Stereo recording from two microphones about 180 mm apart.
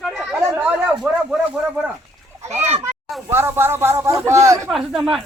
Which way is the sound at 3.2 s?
10° right (ahead or behind).